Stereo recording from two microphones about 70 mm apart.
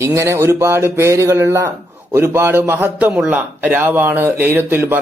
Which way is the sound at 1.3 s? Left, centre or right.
Right.